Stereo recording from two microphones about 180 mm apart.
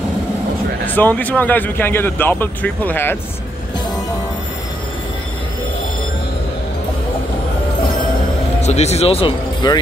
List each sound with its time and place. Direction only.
0.8 s speech: 10° left (ahead or behind)
8.5 s speech: 40° left (ahead or behind)